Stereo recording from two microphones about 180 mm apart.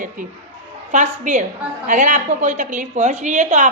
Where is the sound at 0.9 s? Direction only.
45° right (ahead or behind).